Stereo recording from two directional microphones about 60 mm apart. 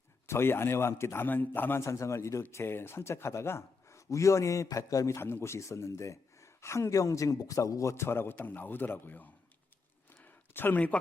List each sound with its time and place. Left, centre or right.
0.3 s a man's voice: left
1.8 s a man's voice: left
2.4 s a man's voice: left
5.2 s a man's voice: left
10.2 s a sound: left
10.8 s speech: left